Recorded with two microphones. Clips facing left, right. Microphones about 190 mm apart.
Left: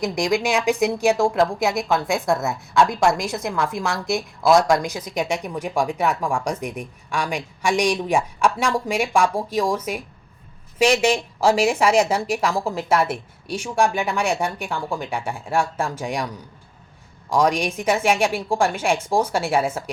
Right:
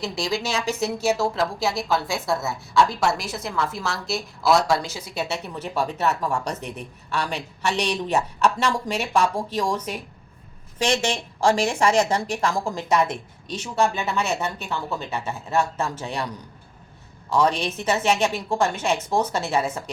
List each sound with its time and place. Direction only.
0.0 s speech: 15° left (ahead or behind)
17.2 s speech: 10° left (ahead or behind)